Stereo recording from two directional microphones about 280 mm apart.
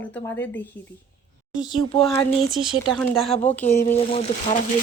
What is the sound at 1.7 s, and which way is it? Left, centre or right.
Speech, centre.